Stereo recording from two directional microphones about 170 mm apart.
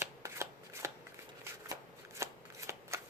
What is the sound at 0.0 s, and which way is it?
Shuffling cards, 15° right (ahead or behind).